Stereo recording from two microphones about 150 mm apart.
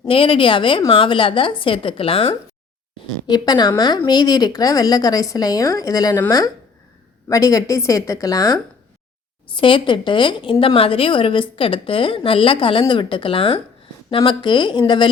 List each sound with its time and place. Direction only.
0.1 s speech: 35° left (ahead or behind)
3.2 s a woman's voice: 30° left (ahead or behind)
7.3 s a woman's voice: 20° left (ahead or behind)
9.5 s speech: 35° left (ahead or behind)